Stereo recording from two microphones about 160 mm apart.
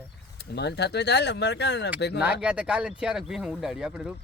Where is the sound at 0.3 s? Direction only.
90° left.